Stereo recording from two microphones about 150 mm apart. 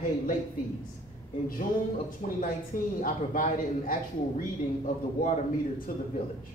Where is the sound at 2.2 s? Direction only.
55° left (ahead or behind); by 6.0 s 70° left (ahead or behind).